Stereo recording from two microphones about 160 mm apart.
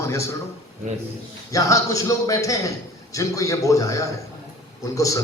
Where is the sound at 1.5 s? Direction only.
20° left (ahead or behind).